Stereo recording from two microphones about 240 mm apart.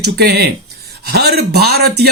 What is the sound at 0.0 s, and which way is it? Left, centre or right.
A man's voice, right.